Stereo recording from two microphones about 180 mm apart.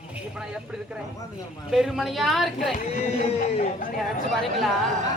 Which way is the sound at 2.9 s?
35° left (ahead or behind).